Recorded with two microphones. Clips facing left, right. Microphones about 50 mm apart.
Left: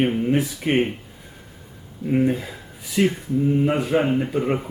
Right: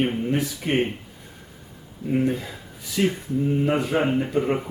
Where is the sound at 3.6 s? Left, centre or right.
Centre.